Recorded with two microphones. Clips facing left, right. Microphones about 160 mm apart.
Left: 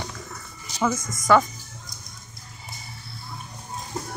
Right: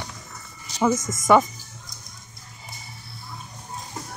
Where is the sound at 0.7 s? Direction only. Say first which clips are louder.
Right 3 dB; 15° right (ahead or behind).